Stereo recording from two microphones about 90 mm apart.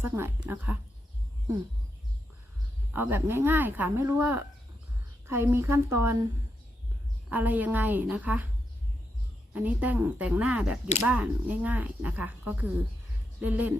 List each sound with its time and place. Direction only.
0.0 s speech: 20° right (ahead or behind)
2.9 s speech: 20° right (ahead or behind)
7.3 s speech: 20° right (ahead or behind)
9.5 s speech: 20° right (ahead or behind)